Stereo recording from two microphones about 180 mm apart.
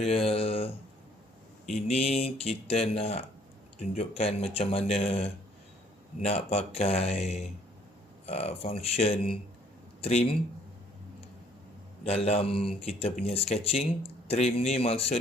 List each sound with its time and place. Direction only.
0.0 s speech: 35° left (ahead or behind)
1.7 s speech: 35° left (ahead or behind)
12.0 s speech: 35° left (ahead or behind)